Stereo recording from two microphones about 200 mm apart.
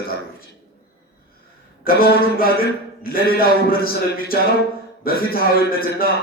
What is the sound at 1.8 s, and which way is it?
A man's voice, 50° left (ahead or behind).